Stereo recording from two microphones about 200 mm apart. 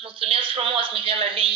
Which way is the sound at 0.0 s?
25° right (ahead or behind).